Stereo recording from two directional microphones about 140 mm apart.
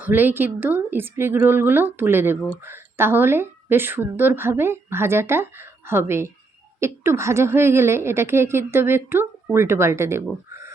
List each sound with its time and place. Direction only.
0.0 s a woman's voice: 15° right (ahead or behind)